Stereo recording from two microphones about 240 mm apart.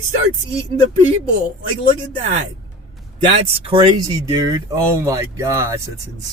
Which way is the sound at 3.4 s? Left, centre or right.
Right.